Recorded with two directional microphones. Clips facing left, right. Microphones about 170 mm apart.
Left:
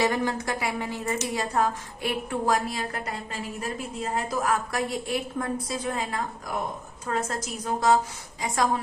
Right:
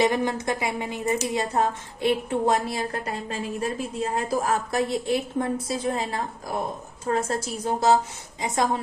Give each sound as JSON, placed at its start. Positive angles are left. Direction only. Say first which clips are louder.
{"t": 0.0, "sound": "a woman's voice", "louder": "right 3 dB", "side_deg": -20}